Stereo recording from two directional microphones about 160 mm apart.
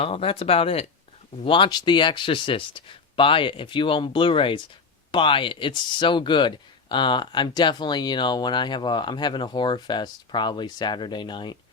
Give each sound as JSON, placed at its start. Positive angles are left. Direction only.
{"t": 0.0, "sound": "speech", "side_deg": 35}